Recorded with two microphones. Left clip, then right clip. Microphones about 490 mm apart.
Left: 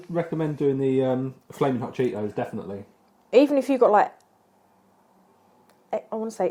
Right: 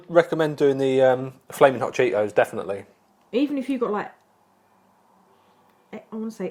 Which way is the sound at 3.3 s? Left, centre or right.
Left.